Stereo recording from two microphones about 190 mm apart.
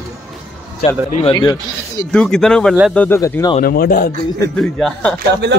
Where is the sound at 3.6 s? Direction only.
50° left (ahead or behind).